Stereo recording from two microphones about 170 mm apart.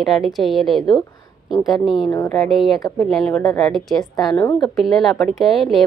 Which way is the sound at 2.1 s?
15° left (ahead or behind).